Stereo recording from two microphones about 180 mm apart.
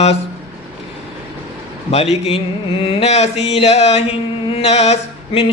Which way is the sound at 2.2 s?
30° left (ahead or behind).